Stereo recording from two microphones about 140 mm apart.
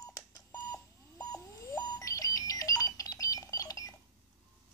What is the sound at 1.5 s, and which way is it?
Alarm clock, 25° left (ahead or behind).